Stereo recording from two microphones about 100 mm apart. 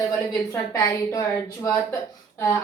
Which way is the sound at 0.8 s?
35° left (ahead or behind).